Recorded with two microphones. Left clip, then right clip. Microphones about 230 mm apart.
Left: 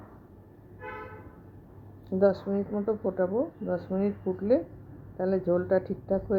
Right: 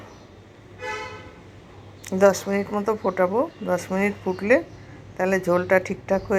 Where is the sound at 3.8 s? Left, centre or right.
Centre.